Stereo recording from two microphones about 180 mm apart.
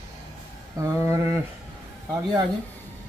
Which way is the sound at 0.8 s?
15° right (ahead or behind).